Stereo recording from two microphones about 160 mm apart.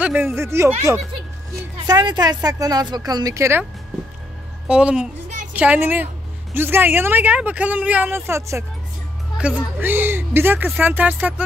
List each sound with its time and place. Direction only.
0.0 s a woman's voice: 5° right (ahead or behind)
1.6 s speech: 25° right (ahead or behind)
4.6 s a woman's voice: 5° right (ahead or behind)